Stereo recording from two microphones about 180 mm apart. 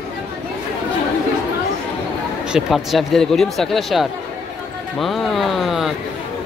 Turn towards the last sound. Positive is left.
turn(degrees=0)  # may be behind; listen again after turning